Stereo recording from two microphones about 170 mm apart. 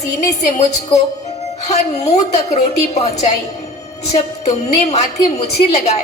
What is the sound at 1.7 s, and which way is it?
A woman's voice, 40° left (ahead or behind).